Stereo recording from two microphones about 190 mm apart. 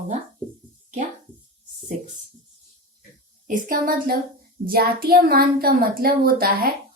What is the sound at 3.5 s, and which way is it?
A woman's voice, 45° right (ahead or behind).